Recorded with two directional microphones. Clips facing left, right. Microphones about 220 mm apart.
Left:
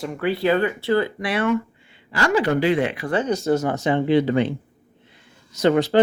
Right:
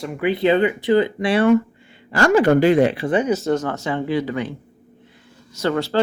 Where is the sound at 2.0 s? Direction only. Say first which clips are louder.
Right 5 dB; 50° right (ahead or behind).